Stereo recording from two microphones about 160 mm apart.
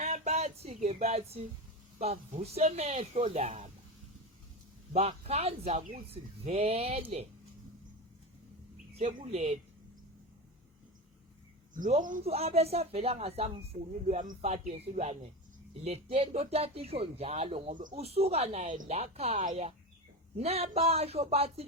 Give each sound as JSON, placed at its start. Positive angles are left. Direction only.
{"t": 0.0, "sound": "a sound", "side_deg": -50}
{"t": 2.0, "sound": "speech", "side_deg": -40}
{"t": 4.9, "sound": "speech", "side_deg": -40}
{"t": 9.0, "sound": "speech", "side_deg": -40}
{"t": 11.7, "sound": "speech", "side_deg": -55}
{"t": 12.2, "sound": "speech", "side_deg": -40}